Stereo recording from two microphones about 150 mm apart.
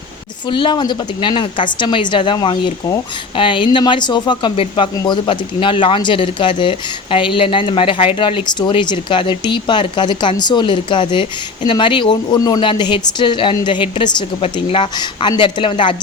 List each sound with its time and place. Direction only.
0.5 s a woman's voice: 30° left (ahead or behind)